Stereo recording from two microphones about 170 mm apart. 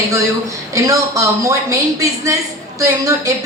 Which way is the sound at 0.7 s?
20° right (ahead or behind).